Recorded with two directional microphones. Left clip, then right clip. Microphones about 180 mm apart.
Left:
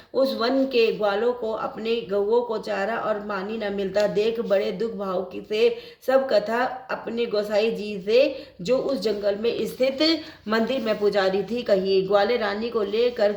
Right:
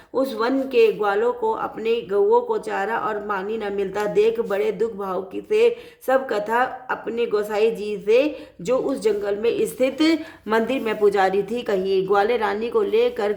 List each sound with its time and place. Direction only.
0.2 s a woman's voice: 50° right (ahead or behind)